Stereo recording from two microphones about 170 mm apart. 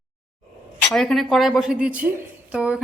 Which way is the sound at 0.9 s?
Centre (ahead or behind).